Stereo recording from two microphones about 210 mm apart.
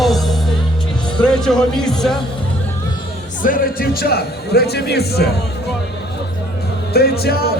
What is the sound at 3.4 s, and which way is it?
A man's voice, 40° left (ahead or behind).